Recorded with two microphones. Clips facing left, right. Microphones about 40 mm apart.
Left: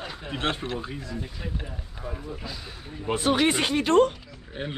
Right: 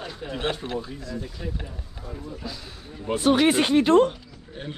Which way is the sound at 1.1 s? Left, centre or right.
Centre.